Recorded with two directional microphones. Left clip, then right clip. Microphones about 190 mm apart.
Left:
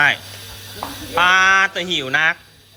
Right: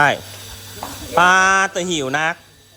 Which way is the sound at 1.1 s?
30° right (ahead or behind).